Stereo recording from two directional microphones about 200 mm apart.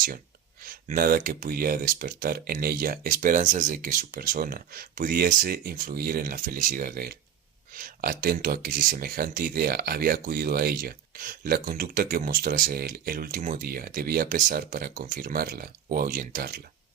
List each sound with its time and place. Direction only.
0.6 s speech: 45° right (ahead or behind)